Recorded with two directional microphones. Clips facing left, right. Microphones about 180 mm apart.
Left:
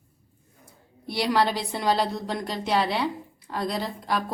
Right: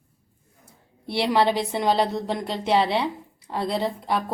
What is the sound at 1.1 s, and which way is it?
A woman's voice, 25° right (ahead or behind).